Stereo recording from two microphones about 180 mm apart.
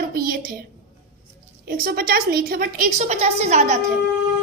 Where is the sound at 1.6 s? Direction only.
55° right (ahead or behind); by 3.8 s 40° right (ahead or behind).